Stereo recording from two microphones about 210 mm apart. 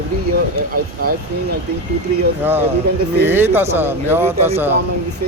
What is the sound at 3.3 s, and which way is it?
A man's voice, 10° right (ahead or behind).